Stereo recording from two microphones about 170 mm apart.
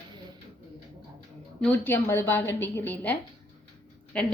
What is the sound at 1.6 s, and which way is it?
A woman's voice, 10° left (ahead or behind).